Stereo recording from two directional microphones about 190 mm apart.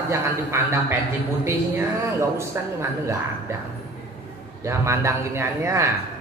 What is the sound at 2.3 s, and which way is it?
A man's voice, 15° right (ahead or behind).